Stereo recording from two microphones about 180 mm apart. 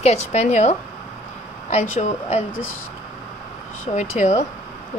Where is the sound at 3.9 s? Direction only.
40° left (ahead or behind).